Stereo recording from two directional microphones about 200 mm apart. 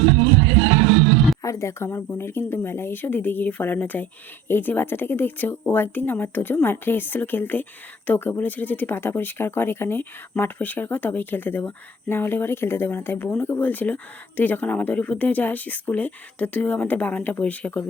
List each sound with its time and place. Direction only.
1.4 s speech: 15° left (ahead or behind)